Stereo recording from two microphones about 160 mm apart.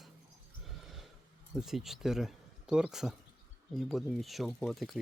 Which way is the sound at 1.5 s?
Centre (ahead or behind).